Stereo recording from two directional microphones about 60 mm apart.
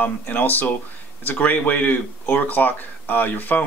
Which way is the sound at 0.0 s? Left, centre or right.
Left.